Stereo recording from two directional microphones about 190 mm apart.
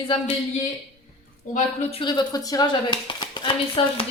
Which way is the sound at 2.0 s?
25° left (ahead or behind).